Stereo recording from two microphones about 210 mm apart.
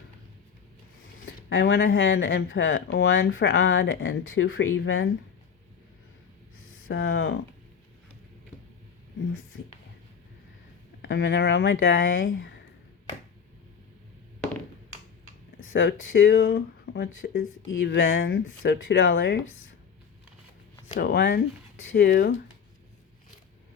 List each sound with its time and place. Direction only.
1.2 s speech: 65° left (ahead or behind)
6.7 s speech: 75° left (ahead or behind)
11.0 s speech: 60° left (ahead or behind)
15.7 s speech: 60° left (ahead or behind)
18.3 s speech: 55° left (ahead or behind)
21.0 s speech: 55° left (ahead or behind)